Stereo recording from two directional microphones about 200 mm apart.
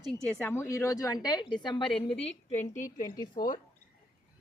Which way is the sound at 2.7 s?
15° left (ahead or behind).